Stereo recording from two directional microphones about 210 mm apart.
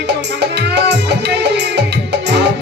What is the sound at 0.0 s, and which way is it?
Music, 55° right (ahead or behind).